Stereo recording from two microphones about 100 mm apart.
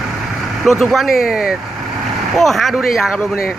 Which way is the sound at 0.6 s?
Centre (ahead or behind).